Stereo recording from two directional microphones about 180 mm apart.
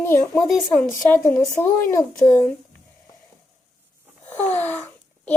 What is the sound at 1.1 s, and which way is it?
A woman's voice, 15° left (ahead or behind).